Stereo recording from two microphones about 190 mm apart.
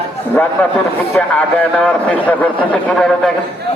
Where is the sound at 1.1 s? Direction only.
5° left (ahead or behind).